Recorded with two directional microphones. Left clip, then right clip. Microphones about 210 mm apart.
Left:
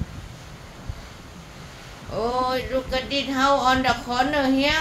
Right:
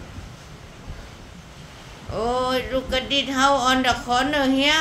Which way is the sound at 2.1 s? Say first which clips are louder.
Right 1 dB; 20° right (ahead or behind).